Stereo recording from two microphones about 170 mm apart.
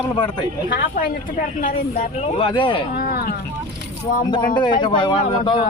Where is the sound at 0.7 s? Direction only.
55° left (ahead or behind).